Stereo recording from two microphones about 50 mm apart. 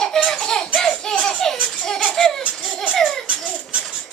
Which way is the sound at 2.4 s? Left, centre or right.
Right.